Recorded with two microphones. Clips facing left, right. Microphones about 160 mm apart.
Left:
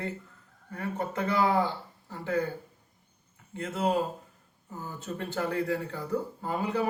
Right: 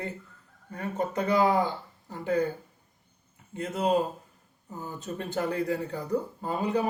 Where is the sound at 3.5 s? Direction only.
20° right (ahead or behind).